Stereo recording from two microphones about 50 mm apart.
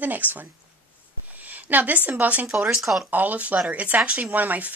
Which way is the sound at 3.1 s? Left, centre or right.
Right.